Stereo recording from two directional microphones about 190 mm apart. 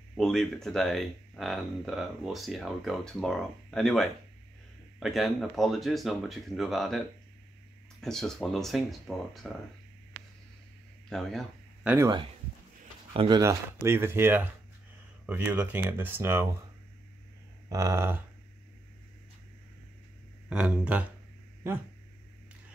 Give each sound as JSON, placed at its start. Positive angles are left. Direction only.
{"t": 0.1, "sound": "speech", "side_deg": 0}
{"t": 8.0, "sound": "speech", "side_deg": 0}
{"t": 11.1, "sound": "speech", "side_deg": 0}
{"t": 13.1, "sound": "speech", "side_deg": -30}
{"t": 13.4, "sound": "speech", "side_deg": -15}
{"t": 17.6, "sound": "speech", "side_deg": -15}
{"t": 20.4, "sound": "speech", "side_deg": -5}